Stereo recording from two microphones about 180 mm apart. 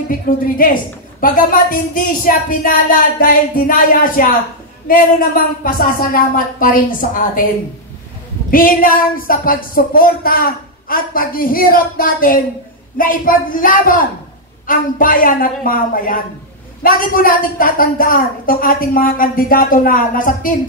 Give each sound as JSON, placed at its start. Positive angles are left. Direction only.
{"t": 0.1, "sound": "speech", "side_deg": 50}
{"t": 8.5, "sound": "speech", "side_deg": 50}